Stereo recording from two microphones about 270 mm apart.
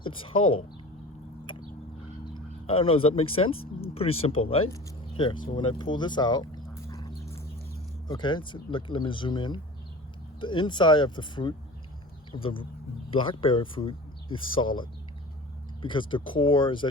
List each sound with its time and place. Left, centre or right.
0.3 s speech: left
2.3 s speech: centre
5.5 s a sound: centre
8.0 s speech: centre
15.8 s speech: centre